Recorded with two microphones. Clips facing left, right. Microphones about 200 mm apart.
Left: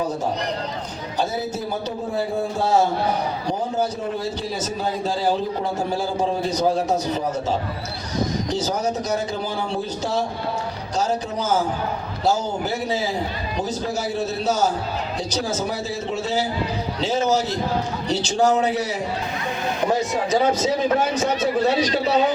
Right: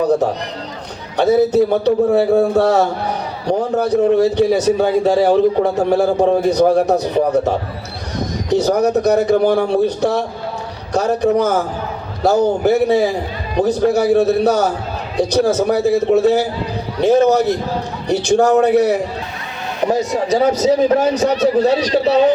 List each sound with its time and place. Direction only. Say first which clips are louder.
1.1 s a man's voice: right 13 dB; 65° right (ahead or behind)
19.9 s a man's voice: right 6 dB; 35° right (ahead or behind)